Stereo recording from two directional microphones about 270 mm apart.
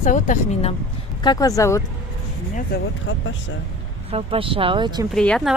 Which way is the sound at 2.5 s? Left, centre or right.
Left.